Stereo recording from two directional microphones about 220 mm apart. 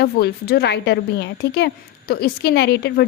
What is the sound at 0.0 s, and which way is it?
Speech, 45° left (ahead or behind).